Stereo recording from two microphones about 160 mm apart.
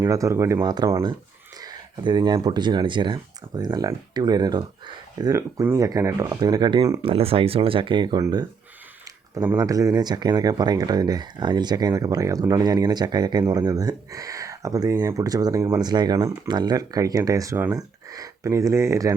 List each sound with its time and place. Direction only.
0.0 s speech: 20° right (ahead or behind)
7.0 s speech: 35° right (ahead or behind); by 19.1 s 20° right (ahead or behind)